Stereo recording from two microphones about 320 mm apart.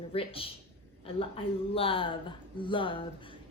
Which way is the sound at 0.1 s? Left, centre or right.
Centre.